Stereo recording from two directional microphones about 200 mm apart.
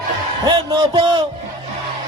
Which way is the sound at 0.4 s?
25° right (ahead or behind).